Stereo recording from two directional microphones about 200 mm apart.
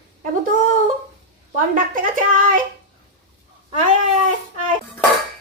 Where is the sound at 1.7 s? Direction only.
40° right (ahead or behind).